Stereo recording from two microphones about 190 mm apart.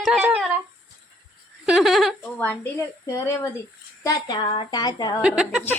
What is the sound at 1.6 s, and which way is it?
Speech, centre (ahead or behind).